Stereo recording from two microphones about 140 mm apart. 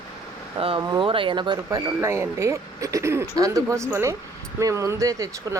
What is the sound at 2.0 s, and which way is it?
Speech, 20° right (ahead or behind).